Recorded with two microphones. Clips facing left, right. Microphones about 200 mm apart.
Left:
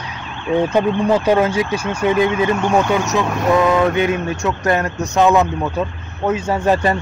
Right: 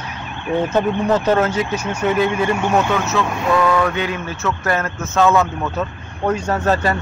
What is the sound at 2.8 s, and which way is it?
Speech, 15° left (ahead or behind).